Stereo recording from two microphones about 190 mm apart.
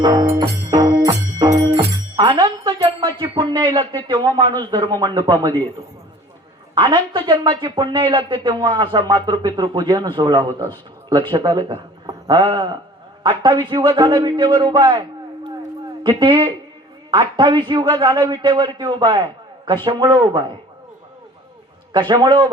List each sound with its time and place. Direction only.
0.0 s a man's voice: 20° right (ahead or behind)
0.7 s music: 20° right (ahead or behind)
3.6 s a man's voice: 25° right (ahead or behind)
6.7 s a man's voice: 25° right (ahead or behind)
16.0 s a man's voice: 25° right (ahead or behind)
21.9 s a man's voice: 20° right (ahead or behind)